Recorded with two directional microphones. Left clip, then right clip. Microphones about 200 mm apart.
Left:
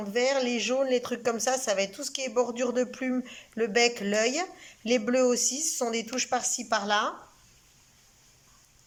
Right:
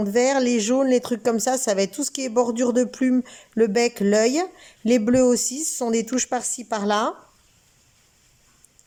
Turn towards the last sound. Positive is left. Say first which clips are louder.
# right 4 dB
turn(degrees=-30)  # may be behind; listen again after turning